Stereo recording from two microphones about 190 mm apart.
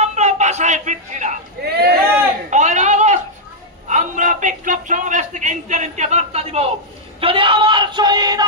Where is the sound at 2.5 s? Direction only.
40° right (ahead or behind).